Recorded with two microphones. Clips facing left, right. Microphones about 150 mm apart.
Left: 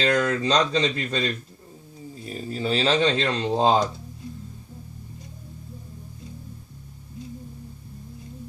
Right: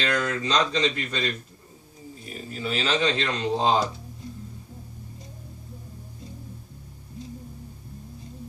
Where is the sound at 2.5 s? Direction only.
30° left (ahead or behind).